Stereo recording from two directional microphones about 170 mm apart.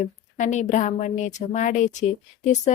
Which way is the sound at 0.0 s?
45° left (ahead or behind).